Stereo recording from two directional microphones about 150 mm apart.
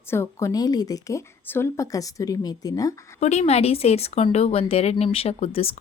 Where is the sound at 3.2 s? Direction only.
50° left (ahead or behind).